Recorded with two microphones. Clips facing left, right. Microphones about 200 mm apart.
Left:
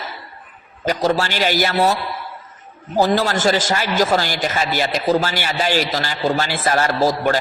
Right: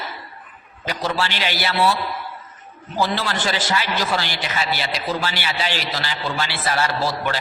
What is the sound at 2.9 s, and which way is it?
A man's voice, 40° left (ahead or behind).